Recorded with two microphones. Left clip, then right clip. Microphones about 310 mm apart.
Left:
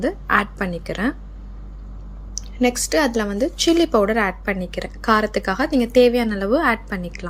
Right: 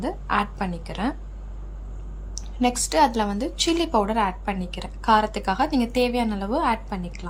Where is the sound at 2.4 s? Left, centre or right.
Centre.